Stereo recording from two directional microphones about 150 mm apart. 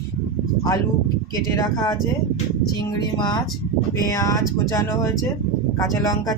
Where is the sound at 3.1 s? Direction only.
30° left (ahead or behind).